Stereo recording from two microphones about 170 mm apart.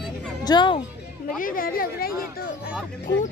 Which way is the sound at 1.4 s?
55° left (ahead or behind).